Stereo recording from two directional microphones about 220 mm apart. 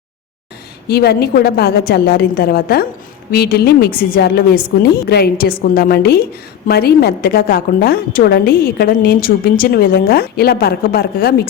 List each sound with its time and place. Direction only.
0.9 s a woman's voice: 45° left (ahead or behind)